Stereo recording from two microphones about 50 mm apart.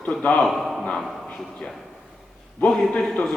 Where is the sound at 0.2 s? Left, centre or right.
Left.